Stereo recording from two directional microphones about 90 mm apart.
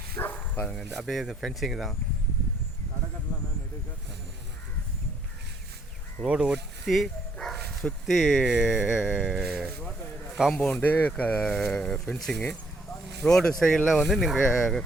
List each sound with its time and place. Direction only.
0.2 s bow-wow: 20° left (ahead or behind)
0.8 s speech: 5° left (ahead or behind)
6.2 s a man's voice: 10° right (ahead or behind)
10.6 s speech: 15° left (ahead or behind)